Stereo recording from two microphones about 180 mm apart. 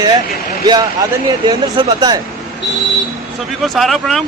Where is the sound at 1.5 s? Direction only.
25° right (ahead or behind).